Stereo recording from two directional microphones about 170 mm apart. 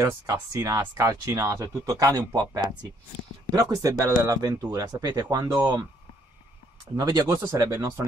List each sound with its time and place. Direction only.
0.0 s speech: 20° right (ahead or behind)
7.0 s speech: 20° right (ahead or behind)